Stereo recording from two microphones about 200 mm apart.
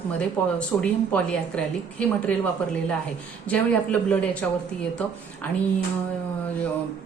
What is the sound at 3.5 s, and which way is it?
A woman's voice, 5° left (ahead or behind).